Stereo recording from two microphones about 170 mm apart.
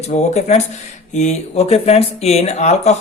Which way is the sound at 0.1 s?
40° left (ahead or behind).